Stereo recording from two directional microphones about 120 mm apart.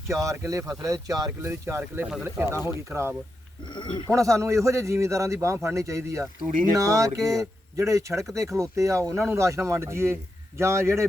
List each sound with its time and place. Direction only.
0.1 s a man's voice: 25° right (ahead or behind)
3.8 s speech: 45° left (ahead or behind)
4.1 s a man's voice: 25° right (ahead or behind)